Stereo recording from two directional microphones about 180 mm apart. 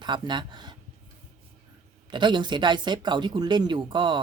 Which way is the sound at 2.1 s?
25° right (ahead or behind).